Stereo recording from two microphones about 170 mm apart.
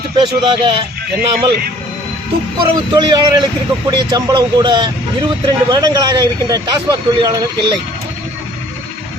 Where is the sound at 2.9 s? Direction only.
25° right (ahead or behind).